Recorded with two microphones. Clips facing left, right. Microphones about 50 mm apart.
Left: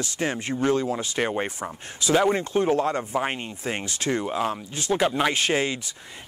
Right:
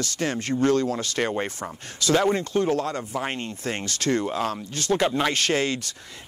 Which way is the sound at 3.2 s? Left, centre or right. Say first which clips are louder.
Even; centre.